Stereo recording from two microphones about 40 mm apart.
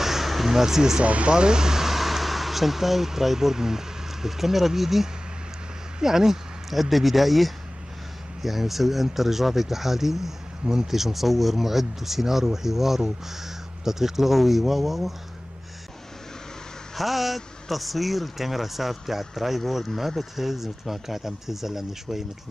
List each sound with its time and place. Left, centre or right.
0.0 s a sound: centre
1.0 s speech: right
1.3 s speech: centre
16.9 s speech: centre